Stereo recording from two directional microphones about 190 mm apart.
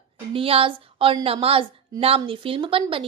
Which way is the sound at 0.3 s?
30° right (ahead or behind).